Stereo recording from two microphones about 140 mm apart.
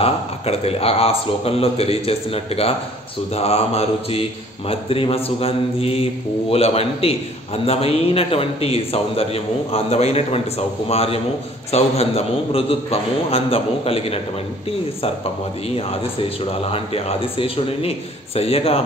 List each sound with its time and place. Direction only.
0.0 s a man's voice: 45° left (ahead or behind)
15.7 s a man's voice: 45° left (ahead or behind)